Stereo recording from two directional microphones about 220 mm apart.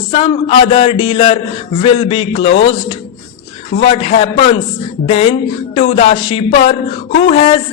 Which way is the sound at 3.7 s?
25° left (ahead or behind).